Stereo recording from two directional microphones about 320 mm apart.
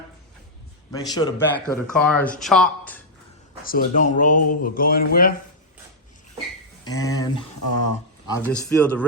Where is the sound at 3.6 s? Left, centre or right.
Left.